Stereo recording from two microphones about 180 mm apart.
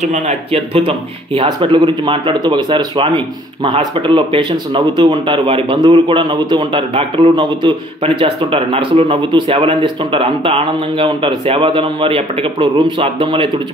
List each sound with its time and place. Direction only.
0.0 s speech: 40° right (ahead or behind)